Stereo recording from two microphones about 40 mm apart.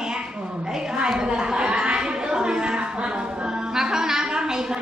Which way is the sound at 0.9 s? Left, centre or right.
Centre.